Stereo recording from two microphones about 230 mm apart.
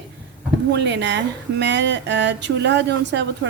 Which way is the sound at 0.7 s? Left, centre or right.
Right.